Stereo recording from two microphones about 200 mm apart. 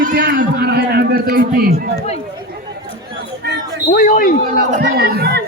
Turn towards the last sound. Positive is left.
turn(degrees=-55)  # may be behind; listen again after turning